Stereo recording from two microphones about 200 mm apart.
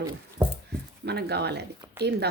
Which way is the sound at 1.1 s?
55° right (ahead or behind).